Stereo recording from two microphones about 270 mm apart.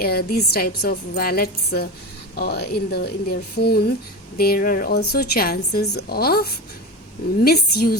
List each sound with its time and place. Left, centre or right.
0.0 s a woman's voice: left
7.4 s a woman's voice: left